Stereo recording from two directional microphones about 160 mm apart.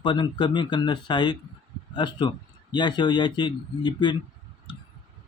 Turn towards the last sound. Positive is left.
turn(degrees=30)  # may be behind; listen again after turning